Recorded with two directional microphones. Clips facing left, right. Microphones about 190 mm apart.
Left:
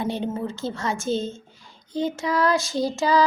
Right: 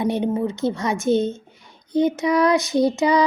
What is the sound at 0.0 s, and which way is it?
A woman's voice, 20° right (ahead or behind).